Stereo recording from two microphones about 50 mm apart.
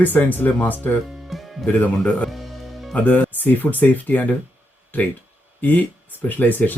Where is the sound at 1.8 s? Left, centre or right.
Left.